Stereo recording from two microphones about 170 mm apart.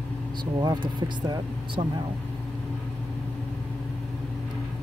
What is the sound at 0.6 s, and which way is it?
Speech, 25° right (ahead or behind).